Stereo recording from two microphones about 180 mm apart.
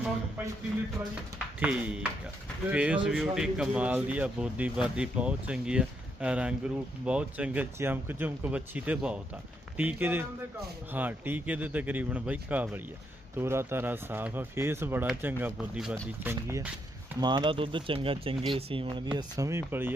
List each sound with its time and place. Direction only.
1.5 s speech: 10° right (ahead or behind); by 19.0 s 30° right (ahead or behind)
19.1 s speech: 15° right (ahead or behind)